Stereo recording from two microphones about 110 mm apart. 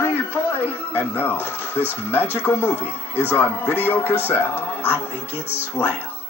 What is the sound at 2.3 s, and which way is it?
Speech, 20° left (ahead or behind).